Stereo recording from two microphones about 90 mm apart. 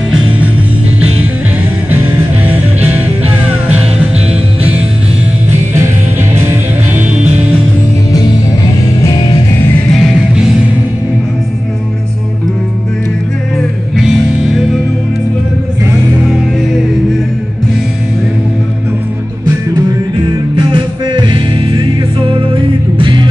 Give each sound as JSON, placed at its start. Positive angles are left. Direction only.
{"t": 2.4, "sound": "music", "side_deg": -20}
{"t": 6.9, "sound": "music", "side_deg": -20}
{"t": 13.9, "sound": "music", "side_deg": -5}
{"t": 20.5, "sound": "music", "side_deg": -65}